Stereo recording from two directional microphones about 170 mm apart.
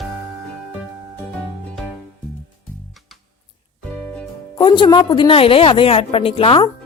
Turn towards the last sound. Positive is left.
turn(degrees=30)  # may be behind; listen again after turning